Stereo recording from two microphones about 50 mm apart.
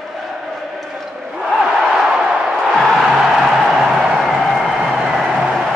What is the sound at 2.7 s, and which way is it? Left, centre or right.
Music, centre.